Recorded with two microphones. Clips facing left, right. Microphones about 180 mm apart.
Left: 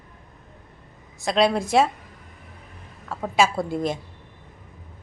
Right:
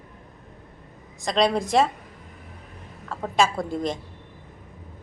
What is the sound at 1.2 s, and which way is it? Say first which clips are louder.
Speech: left 1 dB; 5° left (ahead or behind).